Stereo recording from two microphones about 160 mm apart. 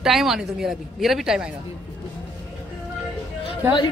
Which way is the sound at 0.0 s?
Centre (ahead or behind).